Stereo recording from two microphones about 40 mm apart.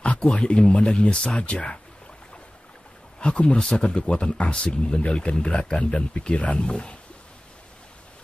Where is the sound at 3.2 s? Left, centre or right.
Left.